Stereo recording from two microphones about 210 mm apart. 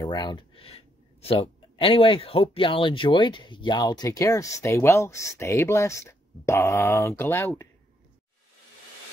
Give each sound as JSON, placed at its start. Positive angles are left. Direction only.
{"t": 0.0, "sound": "speech", "side_deg": 20}